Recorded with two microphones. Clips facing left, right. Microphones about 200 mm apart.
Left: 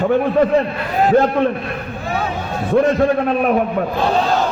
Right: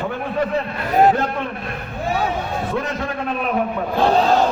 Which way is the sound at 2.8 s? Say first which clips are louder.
Left 11 dB; 50° left (ahead or behind).